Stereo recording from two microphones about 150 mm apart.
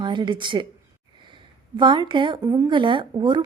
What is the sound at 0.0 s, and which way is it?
Speech, 30° right (ahead or behind).